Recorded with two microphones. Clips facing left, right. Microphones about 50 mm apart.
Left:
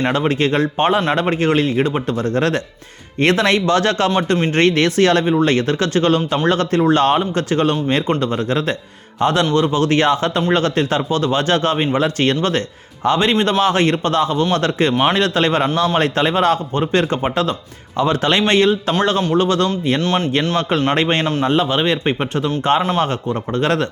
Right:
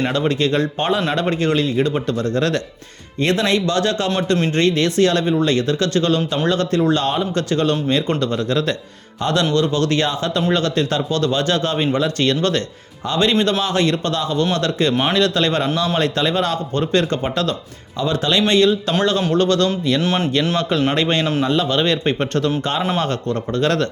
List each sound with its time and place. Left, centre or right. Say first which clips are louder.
0.0 s speech: left 2 dB; left
3.2 s a man's voice: left 3 dB; left
18.0 s speech: left 2 dB; left
19.3 s a man's voice: even; left
20.0 s speech: left 1 dB; centre
20.6 s speech: left 1 dB; left
21.7 s a man's voice: left 1 dB; left